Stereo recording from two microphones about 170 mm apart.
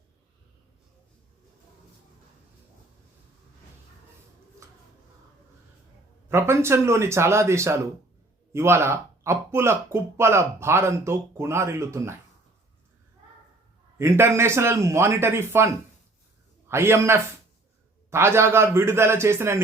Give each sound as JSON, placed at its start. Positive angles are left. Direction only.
{"t": 6.2, "sound": "speech", "side_deg": -15}
{"t": 14.0, "sound": "speech", "side_deg": -15}